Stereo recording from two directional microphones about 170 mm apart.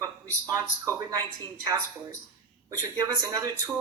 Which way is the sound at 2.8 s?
20° right (ahead or behind).